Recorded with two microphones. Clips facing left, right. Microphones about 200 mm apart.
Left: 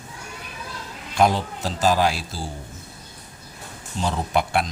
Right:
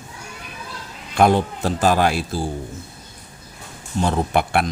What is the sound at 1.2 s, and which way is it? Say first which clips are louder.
Speech: right 4 dB; 55° right (ahead or behind).